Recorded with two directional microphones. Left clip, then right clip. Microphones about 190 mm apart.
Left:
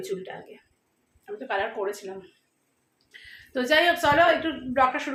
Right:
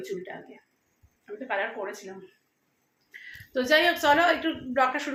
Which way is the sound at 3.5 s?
Centre (ahead or behind).